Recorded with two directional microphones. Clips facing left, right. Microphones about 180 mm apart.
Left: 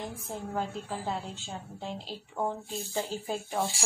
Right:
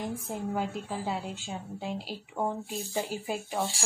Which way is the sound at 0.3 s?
5° right (ahead or behind).